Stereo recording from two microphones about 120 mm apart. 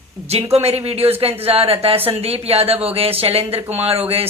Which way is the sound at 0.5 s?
55° right (ahead or behind).